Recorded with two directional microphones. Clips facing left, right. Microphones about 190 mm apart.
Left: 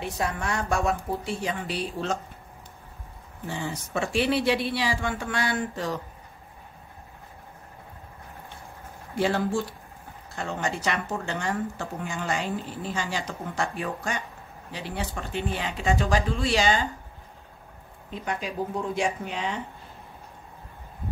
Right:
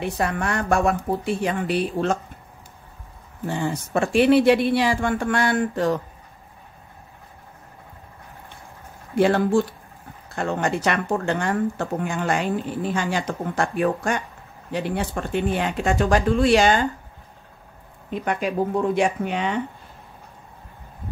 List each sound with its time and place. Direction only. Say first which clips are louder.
0.0 s speech: right 5 dB; 60° right (ahead or behind)
3.4 s a man's voice: right 7 dB; 55° right (ahead or behind)
9.1 s speech: right 7 dB; 55° right (ahead or behind)
18.1 s speech: right 7 dB; 60° right (ahead or behind)